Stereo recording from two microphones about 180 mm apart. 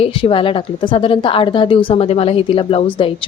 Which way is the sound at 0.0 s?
30° left (ahead or behind).